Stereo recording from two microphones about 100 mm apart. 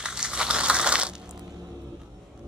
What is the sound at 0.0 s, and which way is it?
Crumpling, 10° right (ahead or behind).